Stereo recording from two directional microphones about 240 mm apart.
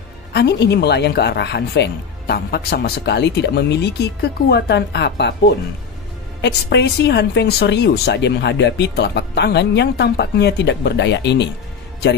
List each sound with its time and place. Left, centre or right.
0.3 s speech: left
6.4 s speech: left